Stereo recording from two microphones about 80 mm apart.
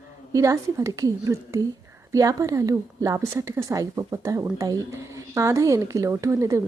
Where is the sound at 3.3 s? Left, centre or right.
Right.